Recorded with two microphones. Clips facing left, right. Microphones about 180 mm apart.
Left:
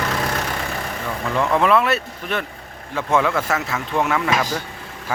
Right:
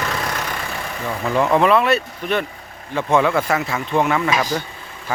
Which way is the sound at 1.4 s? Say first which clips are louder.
Right 2 dB; 5° right (ahead or behind).